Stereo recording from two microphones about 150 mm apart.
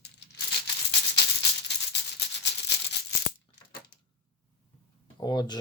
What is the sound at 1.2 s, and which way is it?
Music, 90° left.